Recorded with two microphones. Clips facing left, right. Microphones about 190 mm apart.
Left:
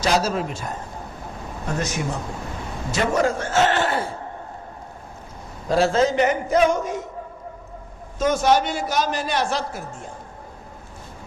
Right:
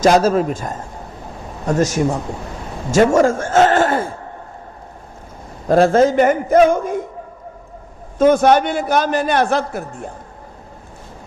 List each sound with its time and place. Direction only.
0.0 s a man's voice: 50° right (ahead or behind)
2.9 s a sound: 45° right (ahead or behind)
5.6 s a man's voice: 50° right (ahead or behind)
8.2 s a man's voice: 55° right (ahead or behind)